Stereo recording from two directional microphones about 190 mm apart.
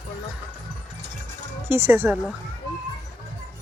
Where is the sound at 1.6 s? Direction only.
10° right (ahead or behind).